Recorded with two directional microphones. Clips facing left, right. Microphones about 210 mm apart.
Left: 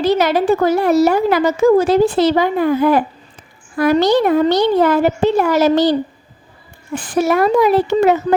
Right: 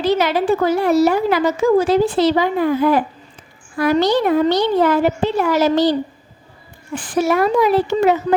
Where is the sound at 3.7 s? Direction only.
45° left (ahead or behind).